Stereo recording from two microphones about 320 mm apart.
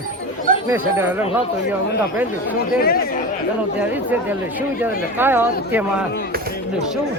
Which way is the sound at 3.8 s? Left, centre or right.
Centre.